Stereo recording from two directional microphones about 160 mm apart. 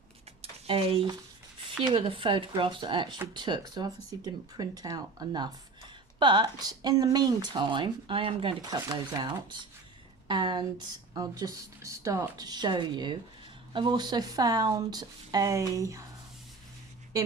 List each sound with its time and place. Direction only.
0.4 s a sound: 35° right (ahead or behind)
1.9 s speech: 35° right (ahead or behind)
8.6 s speech: 25° right (ahead or behind)